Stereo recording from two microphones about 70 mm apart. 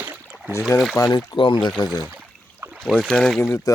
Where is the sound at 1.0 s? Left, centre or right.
Left.